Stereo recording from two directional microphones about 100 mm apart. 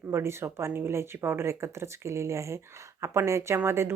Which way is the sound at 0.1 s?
25° right (ahead or behind).